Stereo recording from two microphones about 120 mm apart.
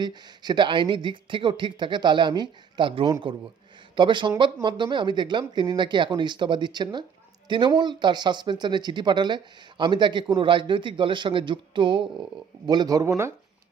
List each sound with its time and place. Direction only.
0.0 s speech: 40° right (ahead or behind)